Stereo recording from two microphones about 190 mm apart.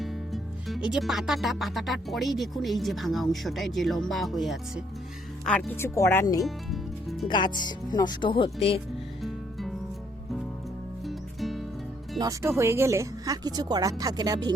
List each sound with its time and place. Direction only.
0.7 s speech: centre (ahead or behind); by 6.4 s 15° left (ahead or behind)
6.4 s music: centre (ahead or behind)
7.3 s speech: 25° left (ahead or behind)
9.2 s music: centre (ahead or behind)
11.0 s music: centre (ahead or behind)
12.2 s speech: 15° right (ahead or behind)